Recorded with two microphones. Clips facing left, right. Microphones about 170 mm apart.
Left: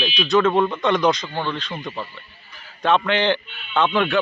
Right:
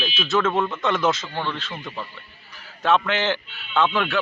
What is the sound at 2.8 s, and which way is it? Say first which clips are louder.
Speech: left 2 dB; 5° right (ahead or behind).